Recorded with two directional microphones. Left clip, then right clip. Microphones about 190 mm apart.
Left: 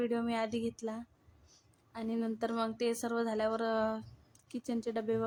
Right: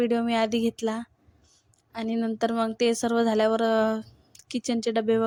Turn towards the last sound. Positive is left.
turn(degrees=-35)  # may be behind; listen again after turning